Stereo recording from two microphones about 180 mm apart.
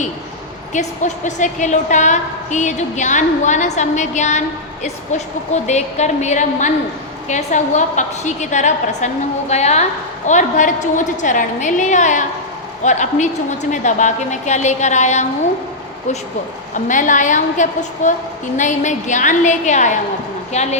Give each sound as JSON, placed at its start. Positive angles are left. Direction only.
{"t": 0.7, "sound": "a woman's voice", "side_deg": 40}
{"t": 16.7, "sound": "a woman's voice", "side_deg": 45}